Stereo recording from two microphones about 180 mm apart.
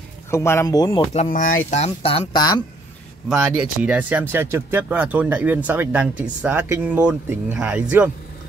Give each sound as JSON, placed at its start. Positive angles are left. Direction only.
{"t": 0.3, "sound": "speech", "side_deg": 15}
{"t": 1.1, "sound": "speech", "side_deg": 45}
{"t": 1.7, "sound": "speech", "side_deg": 35}
{"t": 3.3, "sound": "speech", "side_deg": -5}